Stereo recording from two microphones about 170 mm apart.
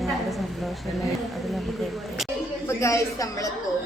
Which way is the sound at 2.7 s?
15° left (ahead or behind).